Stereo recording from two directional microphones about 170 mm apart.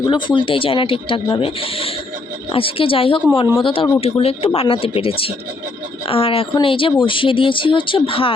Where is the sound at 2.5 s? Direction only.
30° left (ahead or behind).